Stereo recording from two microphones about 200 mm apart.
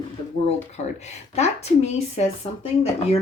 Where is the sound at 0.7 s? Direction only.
35° left (ahead or behind).